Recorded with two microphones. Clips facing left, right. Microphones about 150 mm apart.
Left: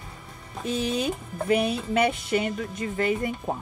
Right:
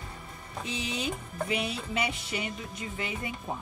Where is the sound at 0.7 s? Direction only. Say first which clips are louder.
Left 8 dB; 55° left (ahead or behind).